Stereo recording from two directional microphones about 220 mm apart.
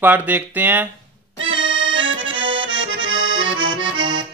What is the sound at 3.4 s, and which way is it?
Accordion, 60° right (ahead or behind).